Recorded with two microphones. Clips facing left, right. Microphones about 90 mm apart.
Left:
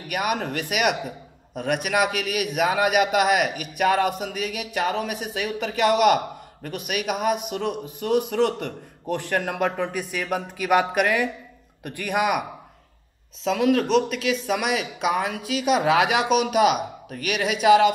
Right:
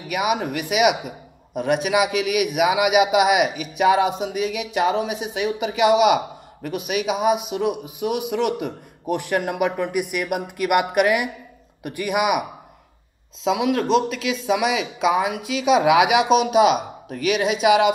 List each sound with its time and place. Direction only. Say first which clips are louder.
0.2 s a man's voice: right 3 dB; 15° right (ahead or behind)
10.1 s a man's voice: right 2 dB; 10° right (ahead or behind)